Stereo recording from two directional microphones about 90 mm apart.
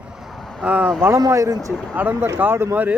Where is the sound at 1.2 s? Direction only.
35° right (ahead or behind).